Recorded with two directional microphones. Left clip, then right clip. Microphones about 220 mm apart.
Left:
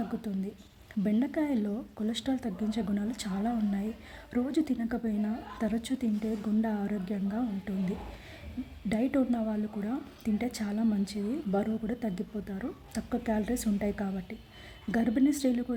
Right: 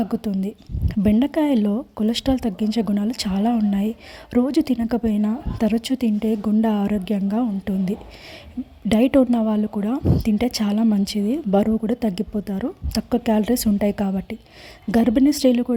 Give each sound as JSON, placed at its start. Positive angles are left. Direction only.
{"t": 0.1, "sound": "a woman's voice", "side_deg": -35}